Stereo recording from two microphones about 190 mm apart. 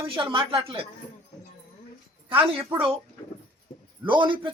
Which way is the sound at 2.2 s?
25° right (ahead or behind).